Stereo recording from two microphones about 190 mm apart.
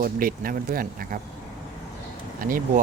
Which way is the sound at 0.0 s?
50° right (ahead or behind).